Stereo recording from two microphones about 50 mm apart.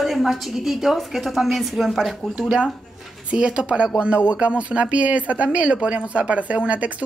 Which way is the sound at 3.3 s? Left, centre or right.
Centre.